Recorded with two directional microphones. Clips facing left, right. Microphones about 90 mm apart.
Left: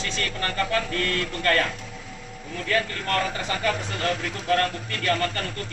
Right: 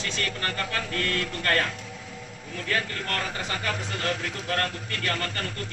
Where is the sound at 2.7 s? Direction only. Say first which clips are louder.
Left 4 dB; 35° right (ahead or behind).